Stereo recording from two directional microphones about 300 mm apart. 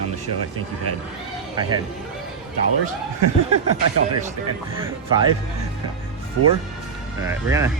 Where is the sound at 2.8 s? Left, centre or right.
Right.